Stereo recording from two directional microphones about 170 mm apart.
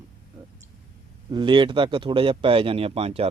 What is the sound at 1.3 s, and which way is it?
Speech, 30° right (ahead or behind).